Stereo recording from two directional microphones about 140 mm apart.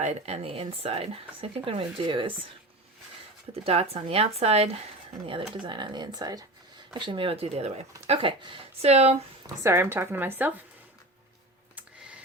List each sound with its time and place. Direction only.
0.0 s speech: 50° right (ahead or behind)
3.5 s speech: 45° right (ahead or behind)
9.6 s speech: 15° right (ahead or behind)